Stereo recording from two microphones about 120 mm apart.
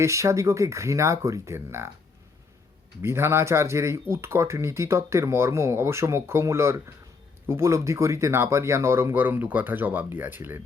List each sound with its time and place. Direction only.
0.0 s speech: 25° right (ahead or behind)
3.0 s speech: 20° right (ahead or behind)